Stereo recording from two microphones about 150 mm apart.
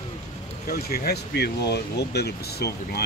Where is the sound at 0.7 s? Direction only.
90° left.